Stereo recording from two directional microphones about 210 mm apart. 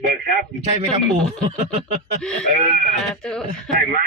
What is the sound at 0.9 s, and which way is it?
Speech, centre (ahead or behind).